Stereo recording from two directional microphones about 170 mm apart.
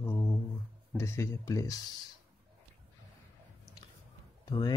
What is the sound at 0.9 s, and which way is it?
Speech, 15° left (ahead or behind).